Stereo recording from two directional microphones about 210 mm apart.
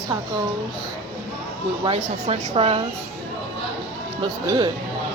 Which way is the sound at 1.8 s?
25° right (ahead or behind).